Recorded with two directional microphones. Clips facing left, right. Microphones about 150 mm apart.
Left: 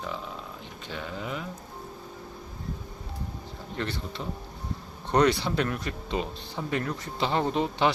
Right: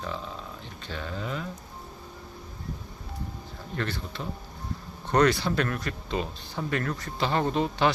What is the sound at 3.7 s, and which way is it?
Speech, 25° left (ahead or behind).